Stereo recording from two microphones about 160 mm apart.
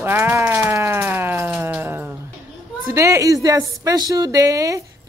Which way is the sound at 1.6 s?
15° right (ahead or behind).